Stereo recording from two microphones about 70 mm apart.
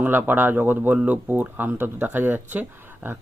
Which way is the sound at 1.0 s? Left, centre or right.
Centre.